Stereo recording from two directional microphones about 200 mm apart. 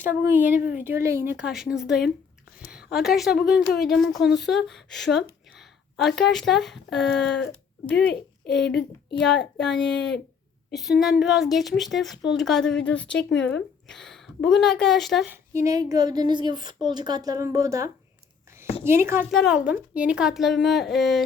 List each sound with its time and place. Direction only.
0.0 s a woman's voice: 10° right (ahead or behind)
7.1 s a sound: 60° left (ahead or behind)
7.5 s a sound: 5° left (ahead or behind)
8.0 s speech: 55° left (ahead or behind)
8.5 s a woman's voice: centre (ahead or behind)
13.3 s speech: 65° left (ahead or behind)
13.8 s speech: centre (ahead or behind)
15.5 s a woman's voice: 15° right (ahead or behind)
19.3 s a woman's voice: centre (ahead or behind)